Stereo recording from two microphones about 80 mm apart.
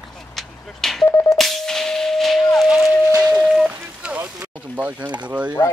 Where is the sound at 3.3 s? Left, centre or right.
Centre.